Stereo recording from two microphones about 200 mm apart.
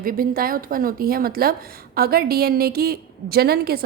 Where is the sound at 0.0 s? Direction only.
45° right (ahead or behind).